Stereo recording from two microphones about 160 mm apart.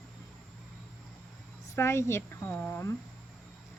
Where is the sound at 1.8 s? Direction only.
15° left (ahead or behind).